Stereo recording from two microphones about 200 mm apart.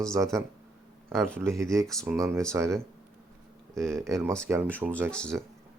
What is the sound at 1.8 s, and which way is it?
Speech, centre (ahead or behind).